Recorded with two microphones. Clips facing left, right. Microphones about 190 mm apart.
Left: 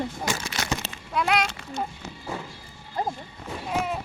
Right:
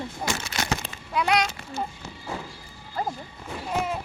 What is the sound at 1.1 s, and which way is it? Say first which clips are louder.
Speech: right 1 dB; centre (ahead or behind).